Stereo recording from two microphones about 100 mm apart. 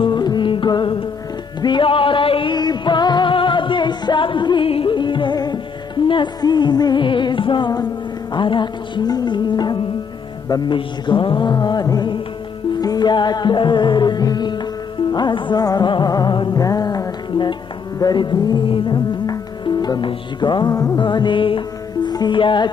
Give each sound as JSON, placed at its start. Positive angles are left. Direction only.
{"t": 0.0, "sound": "music", "side_deg": 45}
{"t": 4.6, "sound": "music", "side_deg": 65}
{"t": 10.5, "sound": "mantra", "side_deg": 50}
{"t": 12.8, "sound": "music", "side_deg": 45}
{"t": 15.0, "sound": "mantra", "side_deg": 45}
{"t": 15.6, "sound": "music", "side_deg": 40}
{"t": 20.1, "sound": "mantra", "side_deg": 50}
{"t": 20.7, "sound": "music", "side_deg": 35}
{"t": 21.0, "sound": "music", "side_deg": 50}